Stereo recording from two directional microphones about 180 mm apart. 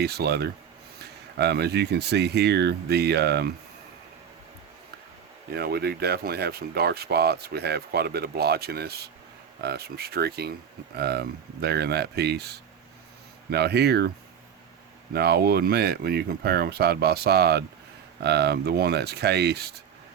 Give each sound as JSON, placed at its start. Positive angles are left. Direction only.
{"t": 0.0, "sound": "speech", "side_deg": -65}
{"t": 5.5, "sound": "speech", "side_deg": -65}
{"t": 15.1, "sound": "speech", "side_deg": -60}